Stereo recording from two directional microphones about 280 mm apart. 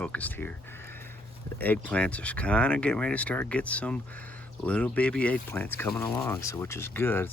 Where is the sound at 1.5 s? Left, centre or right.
Centre.